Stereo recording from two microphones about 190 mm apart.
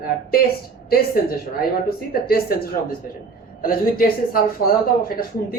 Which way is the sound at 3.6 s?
50° left (ahead or behind).